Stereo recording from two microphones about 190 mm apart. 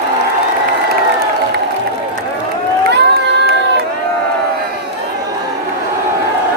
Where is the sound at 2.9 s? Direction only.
60° right (ahead or behind).